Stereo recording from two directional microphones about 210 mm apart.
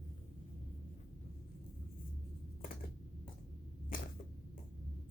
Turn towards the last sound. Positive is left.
turn(degrees=40)  # may be behind; listen again after turning